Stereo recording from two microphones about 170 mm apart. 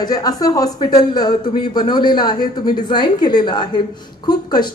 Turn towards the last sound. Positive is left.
turn(degrees=25)  # may be behind; listen again after turning